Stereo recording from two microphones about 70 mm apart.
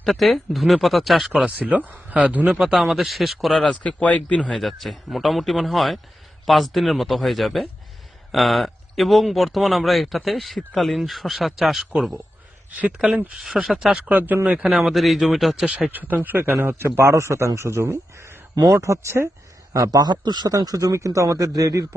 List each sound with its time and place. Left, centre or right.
0.0 s speech: centre
1.7 s speech: right
2.6 s speech: centre
4.4 s speech: centre
12.7 s speech: right
13.4 s speech: centre
14.1 s speech: right
14.7 s speech: centre
15.6 s speech: centre
15.9 s a man's voice: right
18.5 s speech: right
18.8 s a man's voice: right
19.7 s a man's voice: right
20.5 s speech: right